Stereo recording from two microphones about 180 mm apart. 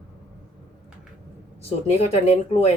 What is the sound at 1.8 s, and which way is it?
Speech, 40° left (ahead or behind).